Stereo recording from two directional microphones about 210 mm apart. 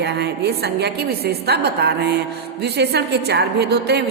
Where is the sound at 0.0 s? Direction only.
50° right (ahead or behind).